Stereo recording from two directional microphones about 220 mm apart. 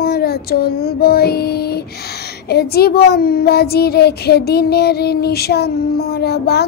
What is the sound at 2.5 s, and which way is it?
Speech, 45° left (ahead or behind).